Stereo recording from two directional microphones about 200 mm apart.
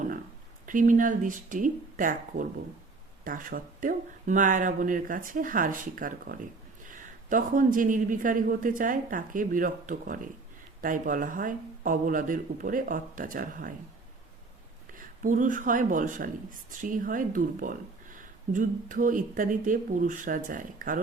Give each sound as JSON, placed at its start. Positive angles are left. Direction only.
{"t": 0.6, "sound": "speech", "side_deg": -40}
{"t": 14.9, "sound": "speech", "side_deg": -40}